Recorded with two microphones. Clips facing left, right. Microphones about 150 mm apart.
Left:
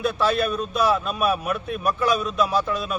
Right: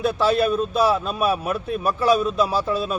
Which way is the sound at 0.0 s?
30° right (ahead or behind).